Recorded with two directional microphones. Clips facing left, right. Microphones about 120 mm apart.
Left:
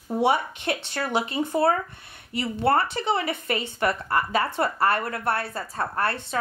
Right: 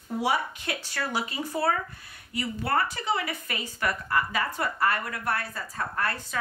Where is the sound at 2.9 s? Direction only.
25° left (ahead or behind).